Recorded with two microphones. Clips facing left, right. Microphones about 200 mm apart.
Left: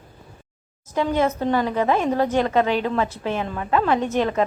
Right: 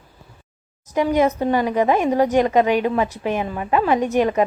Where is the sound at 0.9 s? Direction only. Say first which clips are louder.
Right 3 dB; 15° right (ahead or behind).